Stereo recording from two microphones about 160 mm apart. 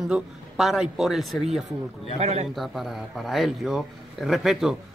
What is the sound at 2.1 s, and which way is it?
Speech, 40° right (ahead or behind).